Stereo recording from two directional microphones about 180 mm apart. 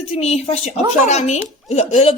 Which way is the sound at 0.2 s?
35° left (ahead or behind).